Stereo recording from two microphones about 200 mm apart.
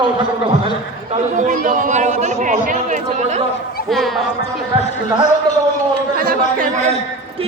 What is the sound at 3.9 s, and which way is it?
Speech, centre (ahead or behind).